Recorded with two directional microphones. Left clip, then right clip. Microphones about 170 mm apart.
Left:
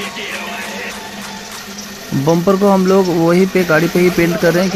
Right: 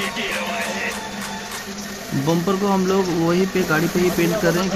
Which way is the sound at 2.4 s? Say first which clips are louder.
Left 10 dB; 25° left (ahead or behind).